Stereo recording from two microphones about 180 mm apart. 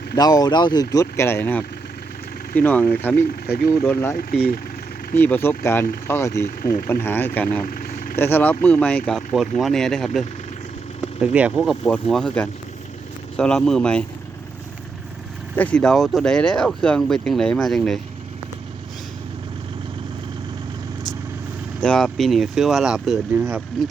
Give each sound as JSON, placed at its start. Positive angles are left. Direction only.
{"t": 0.2, "sound": "speech", "side_deg": 20}
{"t": 4.2, "sound": "speech", "side_deg": 60}
{"t": 5.1, "sound": "speech", "side_deg": 10}
{"t": 6.6, "sound": "speech", "side_deg": 50}
{"t": 6.8, "sound": "speech", "side_deg": 10}
{"t": 7.6, "sound": "vehicle", "side_deg": 50}
{"t": 8.1, "sound": "speech", "side_deg": 10}
{"t": 11.2, "sound": "speech", "side_deg": -5}
{"t": 15.5, "sound": "speech", "side_deg": 5}
{"t": 21.8, "sound": "speech", "side_deg": 5}